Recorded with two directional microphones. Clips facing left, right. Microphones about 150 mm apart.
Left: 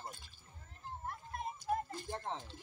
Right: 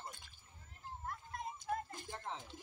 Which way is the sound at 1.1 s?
25° left (ahead or behind).